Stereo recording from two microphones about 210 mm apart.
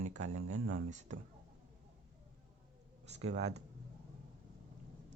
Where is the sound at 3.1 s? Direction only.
30° right (ahead or behind).